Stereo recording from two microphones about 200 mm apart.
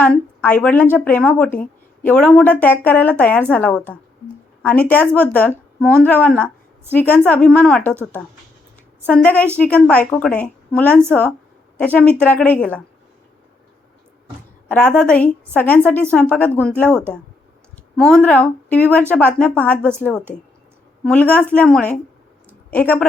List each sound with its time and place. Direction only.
0.0 s a woman's voice: 5° left (ahead or behind)
9.0 s a woman's voice: 5° left (ahead or behind)
14.7 s a woman's voice: 5° left (ahead or behind)